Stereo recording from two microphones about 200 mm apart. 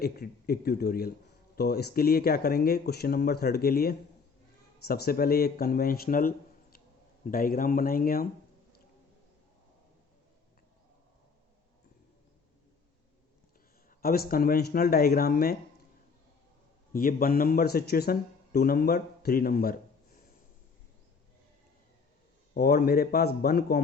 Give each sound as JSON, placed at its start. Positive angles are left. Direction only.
{"t": 0.0, "sound": "a man's voice", "side_deg": 50}
{"t": 14.0, "sound": "a man's voice", "side_deg": 50}
{"t": 16.9, "sound": "a man's voice", "side_deg": 45}
{"t": 22.5, "sound": "a man's voice", "side_deg": 50}